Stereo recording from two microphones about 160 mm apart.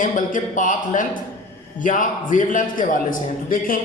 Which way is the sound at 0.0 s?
55° left (ahead or behind).